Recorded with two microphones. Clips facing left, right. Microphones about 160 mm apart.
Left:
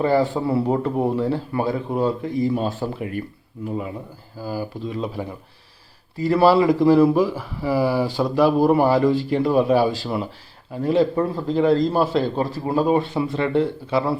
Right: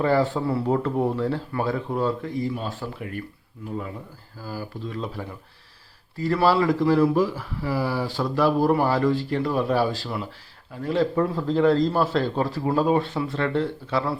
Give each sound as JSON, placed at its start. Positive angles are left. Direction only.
{"t": 0.0, "sound": "a man's voice", "side_deg": 10}
{"t": 2.5, "sound": "a man's voice", "side_deg": 30}
{"t": 11.1, "sound": "a man's voice", "side_deg": 10}